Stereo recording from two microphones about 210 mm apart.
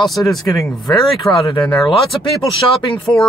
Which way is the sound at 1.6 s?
5° left (ahead or behind).